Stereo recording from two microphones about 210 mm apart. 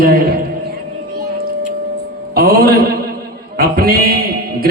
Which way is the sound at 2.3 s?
45° right (ahead or behind).